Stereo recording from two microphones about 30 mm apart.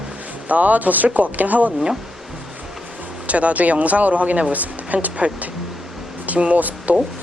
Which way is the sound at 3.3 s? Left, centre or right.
Right.